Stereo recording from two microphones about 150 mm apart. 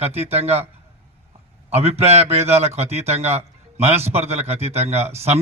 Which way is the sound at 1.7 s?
45° right (ahead or behind).